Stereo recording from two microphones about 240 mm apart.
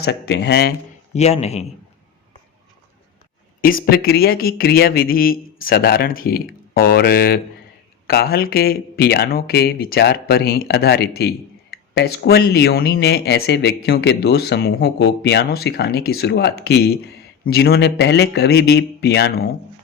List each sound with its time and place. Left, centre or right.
0.0 s speech: left
1.1 s speech: left
3.6 s speech: left